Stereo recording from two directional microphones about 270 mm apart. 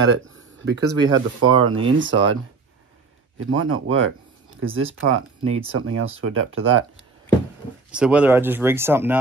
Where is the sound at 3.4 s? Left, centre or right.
Right.